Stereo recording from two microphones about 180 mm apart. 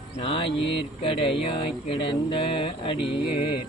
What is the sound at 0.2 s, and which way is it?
Speech, 30° left (ahead or behind).